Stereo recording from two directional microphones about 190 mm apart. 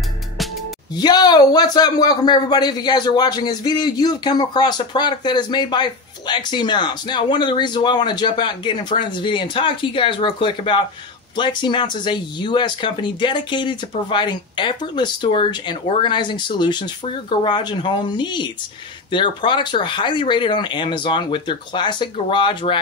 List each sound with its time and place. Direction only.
0.9 s a man's voice: 20° left (ahead or behind)